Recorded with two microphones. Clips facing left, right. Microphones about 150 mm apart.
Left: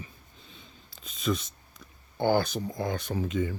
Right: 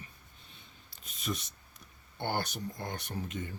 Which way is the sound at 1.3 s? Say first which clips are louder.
Left 8 dB; 90° left.